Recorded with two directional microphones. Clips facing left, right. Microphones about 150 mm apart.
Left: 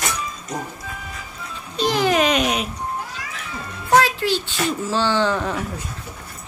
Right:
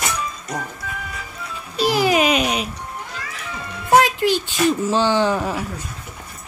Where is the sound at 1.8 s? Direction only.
5° right (ahead or behind).